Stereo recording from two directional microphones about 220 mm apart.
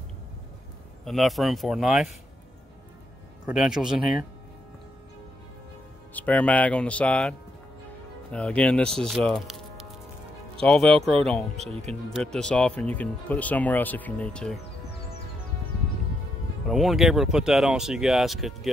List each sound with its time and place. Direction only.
1.0 s speech: centre (ahead or behind)
3.4 s speech: 5° right (ahead or behind)
6.1 s speech: 5° left (ahead or behind)
11.6 s speech: 30° right (ahead or behind)
11.9 s speech: 5° left (ahead or behind)
16.6 s speech: centre (ahead or behind)